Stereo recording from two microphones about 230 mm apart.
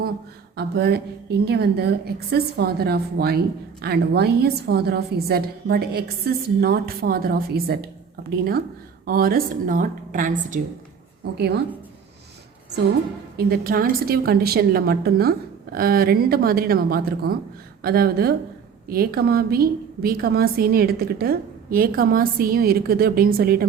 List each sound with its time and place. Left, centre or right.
0.5 s a woman's voice: right
9.0 s a woman's voice: right
11.3 s a woman's voice: right
13.3 s a woman's voice: right